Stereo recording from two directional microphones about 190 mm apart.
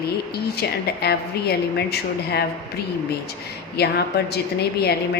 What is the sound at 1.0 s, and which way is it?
A woman's voice, 60° left (ahead or behind).